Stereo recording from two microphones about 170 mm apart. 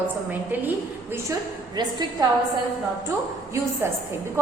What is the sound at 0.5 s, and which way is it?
Speech, 10° right (ahead or behind).